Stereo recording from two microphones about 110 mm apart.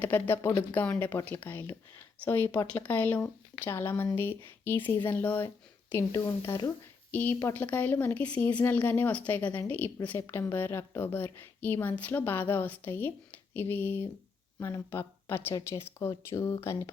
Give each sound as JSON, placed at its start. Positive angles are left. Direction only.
{"t": 0.0, "sound": "a woman's voice", "side_deg": 20}
{"t": 5.9, "sound": "speech", "side_deg": 25}
{"t": 7.1, "sound": "a woman's voice", "side_deg": 15}